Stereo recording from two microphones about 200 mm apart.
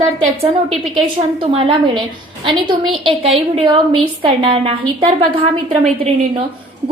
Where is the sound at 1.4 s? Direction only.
25° right (ahead or behind).